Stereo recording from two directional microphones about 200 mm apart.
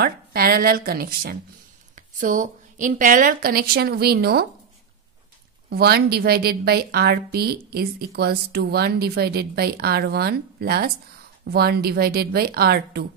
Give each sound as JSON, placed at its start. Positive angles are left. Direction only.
{"t": 0.0, "sound": "a woman's voice", "side_deg": -50}
{"t": 5.7, "sound": "a woman's voice", "side_deg": -50}